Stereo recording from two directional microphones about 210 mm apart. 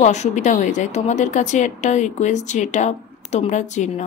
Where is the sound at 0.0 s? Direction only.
35° left (ahead or behind).